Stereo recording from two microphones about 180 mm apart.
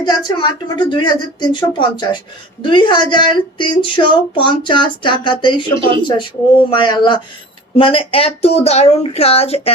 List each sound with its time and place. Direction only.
0.0 s speech: 25° left (ahead or behind)